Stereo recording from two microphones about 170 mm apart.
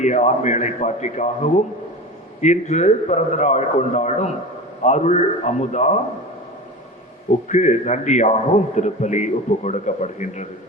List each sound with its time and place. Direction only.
0.0 s a man's voice: 45° left (ahead or behind)
7.4 s a man's voice: 45° left (ahead or behind)